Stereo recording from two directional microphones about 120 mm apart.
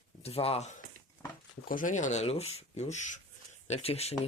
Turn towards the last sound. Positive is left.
turn(degrees=60)  # may be behind; listen again after turning